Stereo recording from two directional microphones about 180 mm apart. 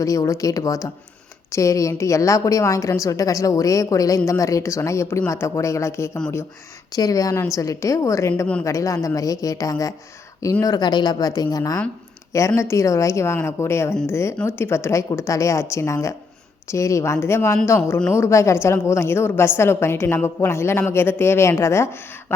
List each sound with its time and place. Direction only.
0.0 s a woman's voice: 20° left (ahead or behind)
6.1 s speech: 5° left (ahead or behind)
6.9 s a woman's voice: 20° left (ahead or behind)
8.6 s a woman's voice: 15° left (ahead or behind)